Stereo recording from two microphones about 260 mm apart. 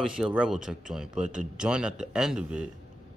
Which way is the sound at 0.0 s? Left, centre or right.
Centre.